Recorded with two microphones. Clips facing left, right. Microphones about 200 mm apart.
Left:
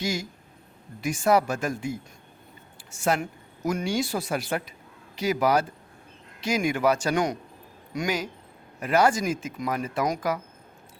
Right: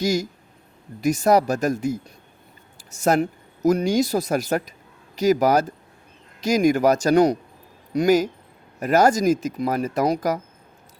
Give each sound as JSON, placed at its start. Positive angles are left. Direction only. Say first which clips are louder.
{"t": 0.0, "sound": "speech", "louder": "right 7 dB", "side_deg": -40}